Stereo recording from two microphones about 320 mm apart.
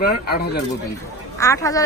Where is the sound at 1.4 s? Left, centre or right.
Centre.